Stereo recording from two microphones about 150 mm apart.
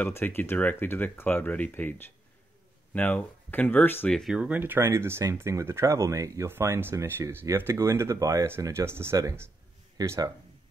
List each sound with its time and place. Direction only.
0.0 s speech: 15° left (ahead or behind)
4.2 s speech: 5° right (ahead or behind); by 10.3 s 20° right (ahead or behind)